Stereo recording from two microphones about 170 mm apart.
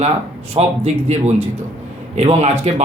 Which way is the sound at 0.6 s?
40° right (ahead or behind).